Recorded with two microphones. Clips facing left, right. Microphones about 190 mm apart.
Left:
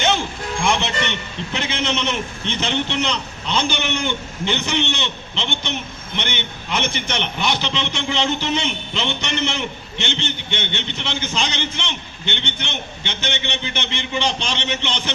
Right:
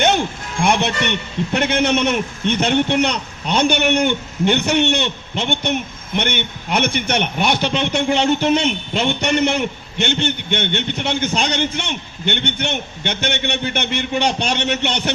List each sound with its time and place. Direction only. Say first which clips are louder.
0.6 s a man's voice: right 4 dB; 55° right (ahead or behind)